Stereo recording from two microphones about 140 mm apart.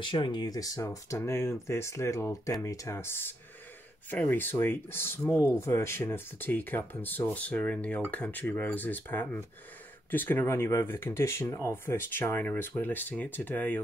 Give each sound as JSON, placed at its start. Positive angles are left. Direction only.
{"t": 0.0, "sound": "speech", "side_deg": 35}